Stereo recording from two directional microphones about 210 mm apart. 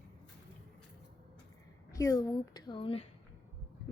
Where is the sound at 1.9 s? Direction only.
15° left (ahead or behind).